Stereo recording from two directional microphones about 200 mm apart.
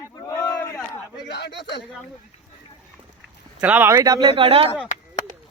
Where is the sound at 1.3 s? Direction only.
60° left (ahead or behind).